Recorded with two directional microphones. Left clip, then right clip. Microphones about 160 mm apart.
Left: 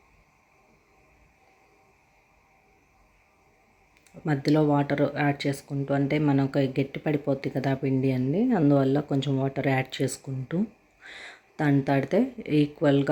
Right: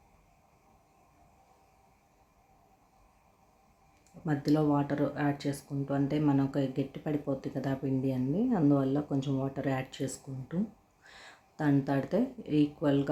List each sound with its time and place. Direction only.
4.3 s speech: 15° left (ahead or behind)